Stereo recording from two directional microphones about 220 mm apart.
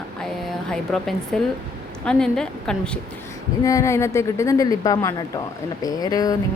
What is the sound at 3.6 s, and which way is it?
Speech, 15° left (ahead or behind).